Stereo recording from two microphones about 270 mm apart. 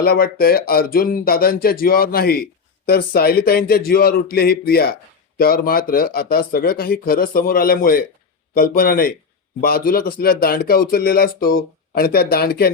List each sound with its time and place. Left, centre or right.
0.0 s speech: left